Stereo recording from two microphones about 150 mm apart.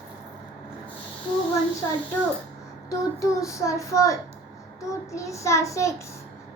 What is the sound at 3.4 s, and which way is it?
A child's voice, 20° left (ahead or behind).